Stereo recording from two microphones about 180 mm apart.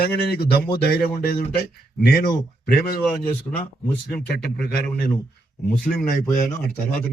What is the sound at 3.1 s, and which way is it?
Speech, 10° left (ahead or behind).